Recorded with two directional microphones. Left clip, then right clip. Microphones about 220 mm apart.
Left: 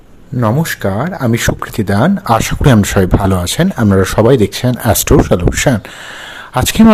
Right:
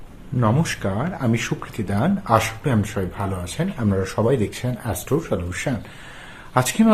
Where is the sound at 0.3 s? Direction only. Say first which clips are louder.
Left 7 dB; 30° left (ahead or behind).